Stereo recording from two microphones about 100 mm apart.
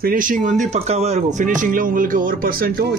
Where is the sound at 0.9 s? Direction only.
90° right.